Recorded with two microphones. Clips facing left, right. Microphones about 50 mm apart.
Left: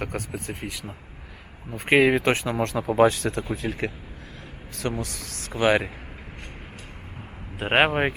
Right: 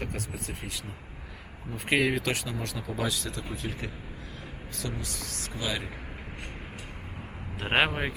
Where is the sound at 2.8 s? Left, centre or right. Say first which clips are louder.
Left 14 dB; left.